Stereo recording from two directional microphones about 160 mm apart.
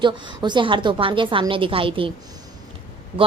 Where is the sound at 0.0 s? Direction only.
30° right (ahead or behind).